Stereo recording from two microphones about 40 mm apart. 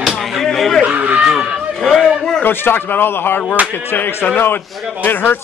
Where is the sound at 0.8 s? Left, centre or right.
Right.